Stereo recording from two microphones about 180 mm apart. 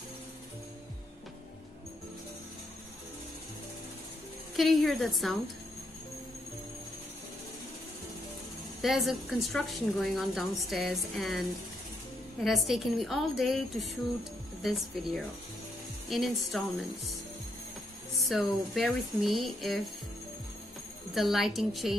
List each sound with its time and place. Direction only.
4.6 s a woman's voice: centre (ahead or behind)
8.8 s a woman's voice: centre (ahead or behind)
18.3 s a woman's voice: centre (ahead or behind)
21.1 s a woman's voice: centre (ahead or behind)